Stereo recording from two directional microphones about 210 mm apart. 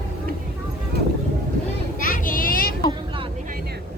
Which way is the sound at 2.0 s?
40° left (ahead or behind).